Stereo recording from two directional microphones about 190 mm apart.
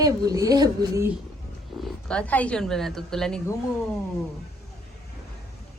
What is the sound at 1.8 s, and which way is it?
Speech, 5° left (ahead or behind).